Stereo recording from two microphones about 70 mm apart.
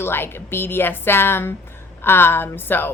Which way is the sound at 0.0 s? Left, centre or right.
Left.